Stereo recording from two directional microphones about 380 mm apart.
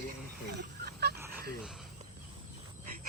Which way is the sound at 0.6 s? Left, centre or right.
Right.